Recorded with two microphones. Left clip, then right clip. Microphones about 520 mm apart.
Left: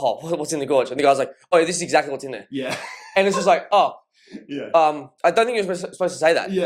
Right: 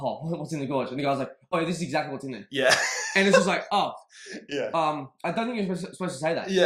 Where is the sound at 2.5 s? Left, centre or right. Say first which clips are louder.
Right 7 dB; right.